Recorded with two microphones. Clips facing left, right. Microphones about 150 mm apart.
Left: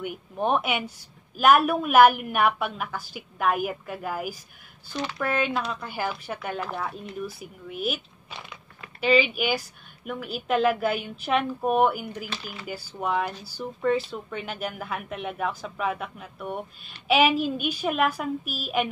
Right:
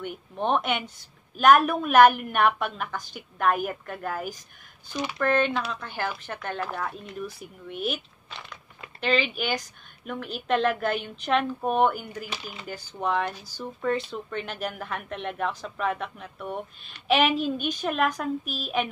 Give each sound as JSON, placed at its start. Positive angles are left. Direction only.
{"t": 0.0, "sound": "a woman's voice", "side_deg": 5}
{"t": 12.3, "sound": "speech", "side_deg": -20}
{"t": 12.6, "sound": "a woman's voice", "side_deg": 5}